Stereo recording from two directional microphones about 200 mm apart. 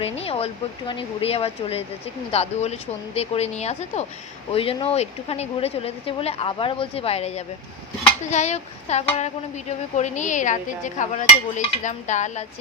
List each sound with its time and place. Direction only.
0.0 s a woman's voice: 30° left (ahead or behind)